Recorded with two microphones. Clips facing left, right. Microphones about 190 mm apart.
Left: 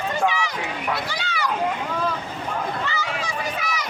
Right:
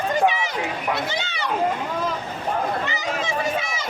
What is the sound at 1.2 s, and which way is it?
Splash, 25° right (ahead or behind).